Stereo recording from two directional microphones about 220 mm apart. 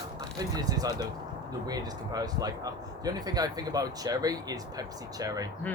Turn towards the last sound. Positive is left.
turn(degrees=-15)  # may be behind; listen again after turning